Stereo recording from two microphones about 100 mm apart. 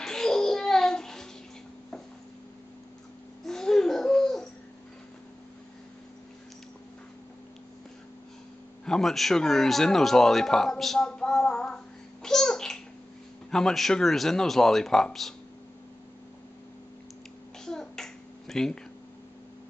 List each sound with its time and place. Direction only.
0.0 s babbling: 5° left (ahead or behind)
3.4 s babbling: 5° left (ahead or behind)
8.8 s a sound: 5° left (ahead or behind)
13.5 s speech: 5° left (ahead or behind)
17.6 s finger snapping: 5° left (ahead or behind)